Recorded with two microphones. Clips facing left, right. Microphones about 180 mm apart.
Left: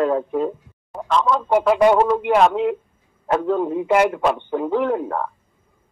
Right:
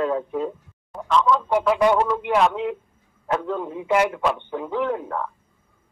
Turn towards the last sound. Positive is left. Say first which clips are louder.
# left 4 dB
turn(degrees=45)  # may be behind; listen again after turning